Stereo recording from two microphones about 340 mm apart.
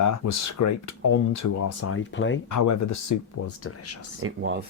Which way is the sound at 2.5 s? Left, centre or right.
Left.